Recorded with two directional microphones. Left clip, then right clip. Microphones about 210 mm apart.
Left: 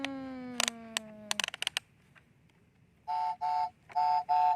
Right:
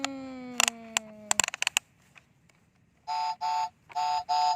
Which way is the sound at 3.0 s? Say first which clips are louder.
Right 2 dB; 40° right (ahead or behind).